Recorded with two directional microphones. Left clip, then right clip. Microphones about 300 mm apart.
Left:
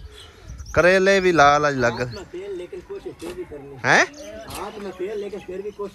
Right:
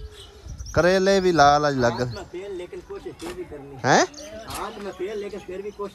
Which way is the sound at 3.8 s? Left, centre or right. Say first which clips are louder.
Left 2 dB; centre.